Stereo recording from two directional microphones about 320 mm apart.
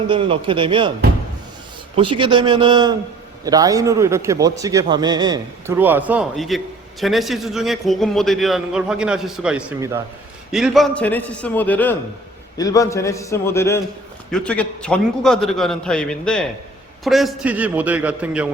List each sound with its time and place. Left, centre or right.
0.1 s a man's voice: centre
2.0 s a man's voice: centre